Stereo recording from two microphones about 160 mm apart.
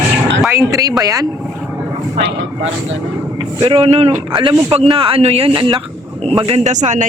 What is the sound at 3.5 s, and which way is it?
Speech, 35° right (ahead or behind).